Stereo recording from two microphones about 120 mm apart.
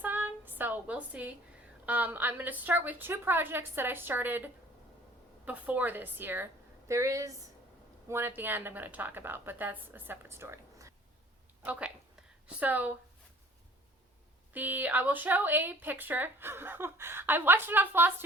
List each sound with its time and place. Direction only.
0.0 s a sound: 15° right (ahead or behind)
1.9 s speech: 15° right (ahead or behind)
11.6 s a woman's voice: 10° right (ahead or behind)
14.5 s speech: 15° right (ahead or behind)